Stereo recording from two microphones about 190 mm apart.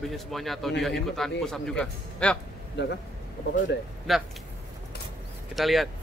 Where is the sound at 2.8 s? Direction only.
70° left (ahead or behind).